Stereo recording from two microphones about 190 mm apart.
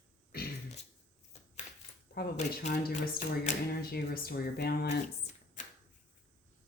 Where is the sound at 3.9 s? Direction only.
55° left (ahead or behind).